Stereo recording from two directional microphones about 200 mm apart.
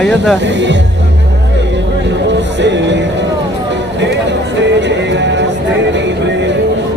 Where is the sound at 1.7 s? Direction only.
60° right (ahead or behind).